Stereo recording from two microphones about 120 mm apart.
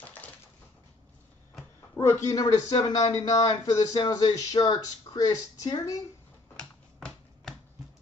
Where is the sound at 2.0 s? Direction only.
25° left (ahead or behind).